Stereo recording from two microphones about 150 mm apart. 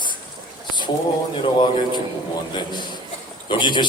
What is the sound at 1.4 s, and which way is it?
Speech, 30° left (ahead or behind).